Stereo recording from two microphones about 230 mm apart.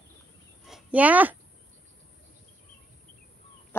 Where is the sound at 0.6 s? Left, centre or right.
Centre.